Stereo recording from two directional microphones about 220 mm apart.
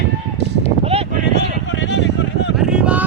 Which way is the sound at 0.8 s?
30° right (ahead or behind).